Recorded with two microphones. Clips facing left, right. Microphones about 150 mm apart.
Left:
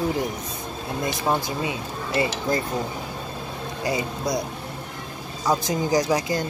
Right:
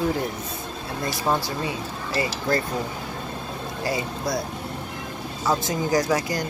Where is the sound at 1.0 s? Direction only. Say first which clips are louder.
Even; 20° left (ahead or behind).